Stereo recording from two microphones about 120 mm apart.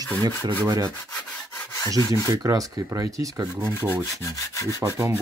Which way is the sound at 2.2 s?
30° right (ahead or behind).